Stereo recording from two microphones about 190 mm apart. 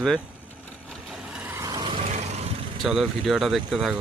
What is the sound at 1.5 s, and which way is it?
Vehicle, 20° right (ahead or behind).